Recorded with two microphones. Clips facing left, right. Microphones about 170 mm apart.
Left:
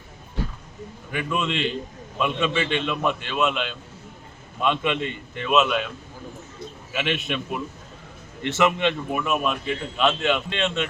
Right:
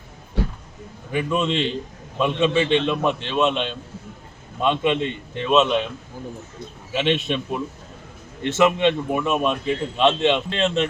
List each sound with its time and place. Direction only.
1.1 s a man's voice: 35° right (ahead or behind)
6.9 s a man's voice: 25° right (ahead or behind)
9.2 s a man's voice: 30° right (ahead or behind)